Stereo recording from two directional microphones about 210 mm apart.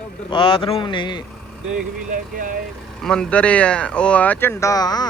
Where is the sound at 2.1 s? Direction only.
40° right (ahead or behind).